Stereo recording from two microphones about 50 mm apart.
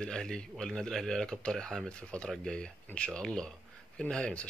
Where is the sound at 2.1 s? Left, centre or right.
Left.